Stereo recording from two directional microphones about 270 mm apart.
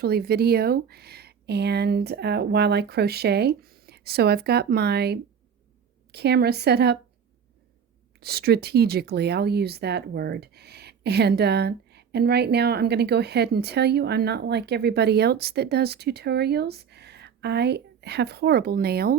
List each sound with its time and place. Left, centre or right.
0.0 s speech: right
8.2 s speech: right